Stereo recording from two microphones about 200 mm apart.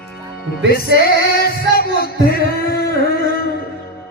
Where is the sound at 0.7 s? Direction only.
50° left (ahead or behind).